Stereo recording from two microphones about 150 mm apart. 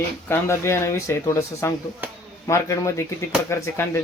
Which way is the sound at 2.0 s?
10° right (ahead or behind).